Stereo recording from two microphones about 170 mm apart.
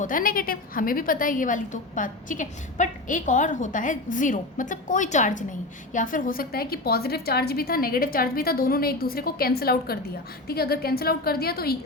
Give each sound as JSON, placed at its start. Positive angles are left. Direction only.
{"t": 0.0, "sound": "a woman's voice", "side_deg": 55}